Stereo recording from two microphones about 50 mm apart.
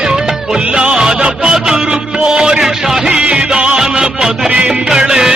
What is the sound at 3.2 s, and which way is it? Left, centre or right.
Music, right.